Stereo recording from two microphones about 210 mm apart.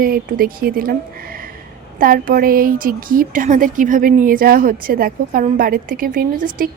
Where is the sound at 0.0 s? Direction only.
45° right (ahead or behind).